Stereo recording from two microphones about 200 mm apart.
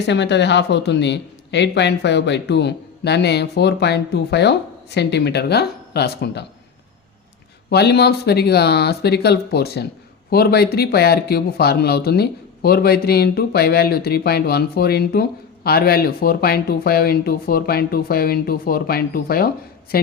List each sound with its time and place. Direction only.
0.0 s speech: 60° left (ahead or behind)
7.7 s a man's voice: 55° left (ahead or behind)